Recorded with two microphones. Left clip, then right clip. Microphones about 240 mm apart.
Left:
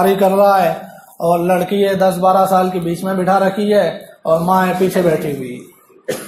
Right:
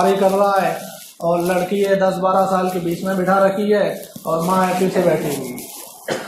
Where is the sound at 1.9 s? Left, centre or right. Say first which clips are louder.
Left 5 dB; left.